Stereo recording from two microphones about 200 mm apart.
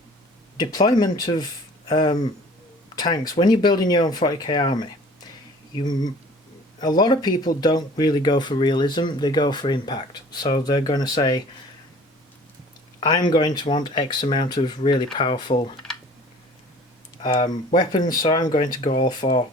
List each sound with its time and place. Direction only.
0.5 s speech: 20° left (ahead or behind)
13.0 s speech: 20° left (ahead or behind)
17.2 s speech: 20° left (ahead or behind)